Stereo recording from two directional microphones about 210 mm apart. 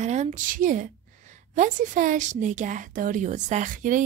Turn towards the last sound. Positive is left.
turn(degrees=-40)  # may be behind; listen again after turning